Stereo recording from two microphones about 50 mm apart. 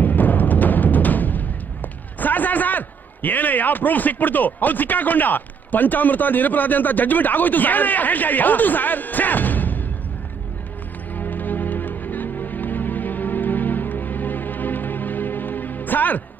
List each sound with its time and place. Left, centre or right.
0.0 s music: left
2.1 s a man's voice: left
11.1 s music: left